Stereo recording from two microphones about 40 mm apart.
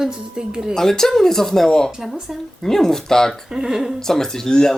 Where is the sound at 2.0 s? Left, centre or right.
Centre.